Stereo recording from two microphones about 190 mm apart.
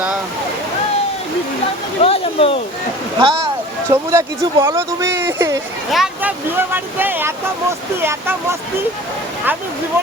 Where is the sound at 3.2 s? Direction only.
25° right (ahead or behind).